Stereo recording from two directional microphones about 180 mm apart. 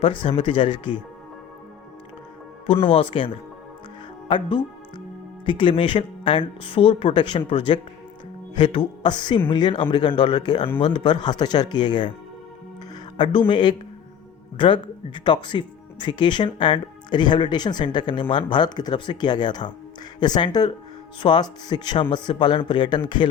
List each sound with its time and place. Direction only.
0.0 s speech: 30° left (ahead or behind)
2.8 s speech: 30° left (ahead or behind)
4.3 s speech: 25° left (ahead or behind)
13.1 s speech: 30° left (ahead or behind)